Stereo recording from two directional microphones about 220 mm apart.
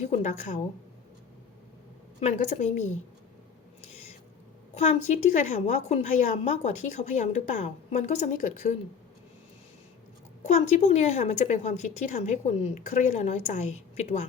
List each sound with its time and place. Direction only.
0.0 s a woman's voice: 30° left (ahead or behind)
2.2 s a woman's voice: 30° left (ahead or behind)
4.7 s a woman's voice: 30° left (ahead or behind)
10.4 s a woman's voice: 30° left (ahead or behind)